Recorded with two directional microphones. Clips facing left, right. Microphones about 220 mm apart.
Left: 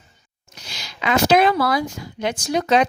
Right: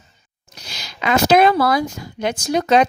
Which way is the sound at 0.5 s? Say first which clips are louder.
Right 1 dB; 40° right (ahead or behind).